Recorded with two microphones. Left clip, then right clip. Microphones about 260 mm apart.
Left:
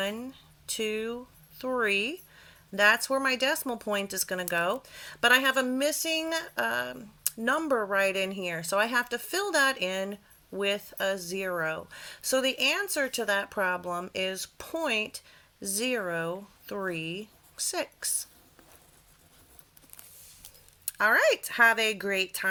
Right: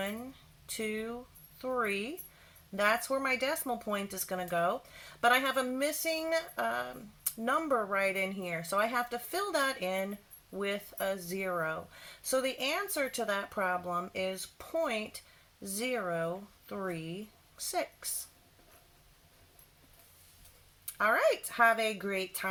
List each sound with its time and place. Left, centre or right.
0.8 s speech: left
21.0 s speech: left